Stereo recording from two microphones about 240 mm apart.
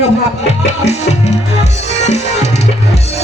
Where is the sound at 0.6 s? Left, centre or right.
Left.